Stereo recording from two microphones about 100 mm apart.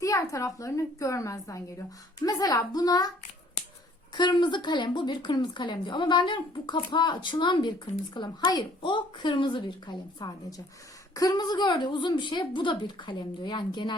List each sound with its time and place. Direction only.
0.0 s a woman's voice: 35° left (ahead or behind)
4.1 s a woman's voice: 45° left (ahead or behind)